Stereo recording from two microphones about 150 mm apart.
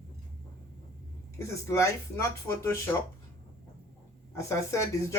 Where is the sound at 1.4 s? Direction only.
20° left (ahead or behind).